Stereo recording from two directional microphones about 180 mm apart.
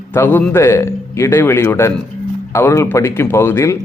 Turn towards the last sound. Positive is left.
turn(degrees=15)  # may be behind; listen again after turning